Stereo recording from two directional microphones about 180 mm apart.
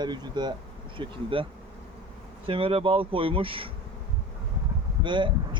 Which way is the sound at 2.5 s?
30° right (ahead or behind).